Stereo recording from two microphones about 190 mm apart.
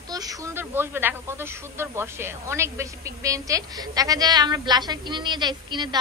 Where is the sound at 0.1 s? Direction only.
15° right (ahead or behind).